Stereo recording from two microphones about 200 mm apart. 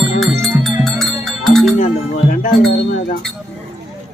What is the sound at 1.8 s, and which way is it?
Music, 40° left (ahead or behind).